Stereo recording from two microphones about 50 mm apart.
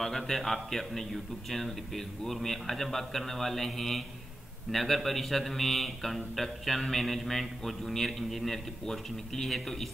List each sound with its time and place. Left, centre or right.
0.0 s a man's voice: centre